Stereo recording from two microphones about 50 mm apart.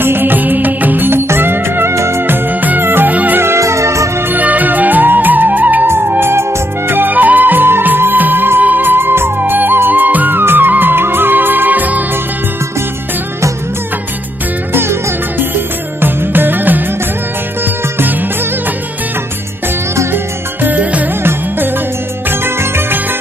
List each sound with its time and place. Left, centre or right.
0.0 s music: right
2.2 s music: right
3.1 s music: right
3.5 s music: right
4.3 s music: right
5.9 s music: right
14.7 s music: right
20.6 s music: right
21.2 s music: right